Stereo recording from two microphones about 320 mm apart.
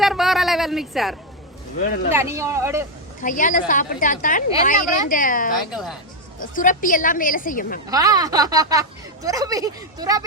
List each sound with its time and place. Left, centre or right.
0.0 s a sound: centre
1.8 s a woman's voice: left
2.1 s speech: centre
3.2 s a woman's voice: left
5.7 s speech: centre
6.5 s a woman's voice: left
7.9 s speech: centre